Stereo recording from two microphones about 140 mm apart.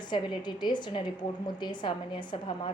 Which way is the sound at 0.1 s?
35° left (ahead or behind).